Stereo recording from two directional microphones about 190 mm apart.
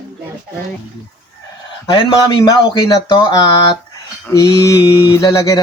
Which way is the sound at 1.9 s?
25° left (ahead or behind).